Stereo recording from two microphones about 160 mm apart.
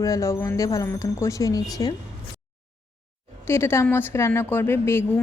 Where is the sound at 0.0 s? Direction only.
20° left (ahead or behind).